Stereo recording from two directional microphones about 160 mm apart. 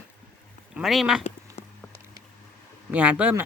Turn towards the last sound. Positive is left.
turn(degrees=-10)  # may be behind; listen again after turning